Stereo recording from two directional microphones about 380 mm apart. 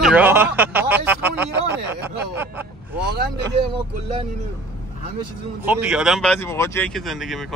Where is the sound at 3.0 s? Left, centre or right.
Right.